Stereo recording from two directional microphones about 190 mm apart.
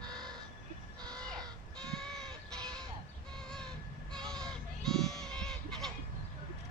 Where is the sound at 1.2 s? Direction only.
5° left (ahead or behind).